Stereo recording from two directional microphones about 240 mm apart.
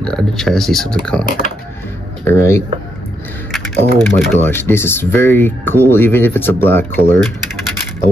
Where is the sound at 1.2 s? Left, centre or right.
Left.